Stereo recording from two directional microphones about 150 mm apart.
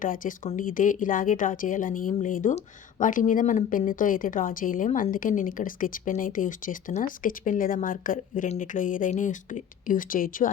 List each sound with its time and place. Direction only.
0.0 s speech: 65° left (ahead or behind)